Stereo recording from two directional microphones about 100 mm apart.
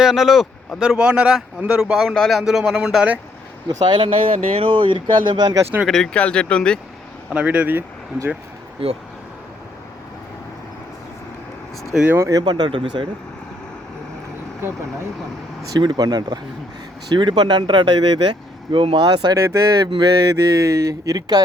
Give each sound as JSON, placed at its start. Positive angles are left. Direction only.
{"t": 0.0, "sound": "speech", "side_deg": -5}
{"t": 3.7, "sound": "speech", "side_deg": -50}
{"t": 5.8, "sound": "speech", "side_deg": 5}
{"t": 7.3, "sound": "speech", "side_deg": -10}
{"t": 8.8, "sound": "speech", "side_deg": -70}
{"t": 12.1, "sound": "speech", "side_deg": -30}
{"t": 12.4, "sound": "speech", "side_deg": -45}
{"t": 15.6, "sound": "speech", "side_deg": -40}
{"t": 19.4, "sound": "speech", "side_deg": -35}